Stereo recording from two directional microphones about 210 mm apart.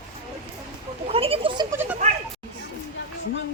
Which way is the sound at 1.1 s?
25° right (ahead or behind).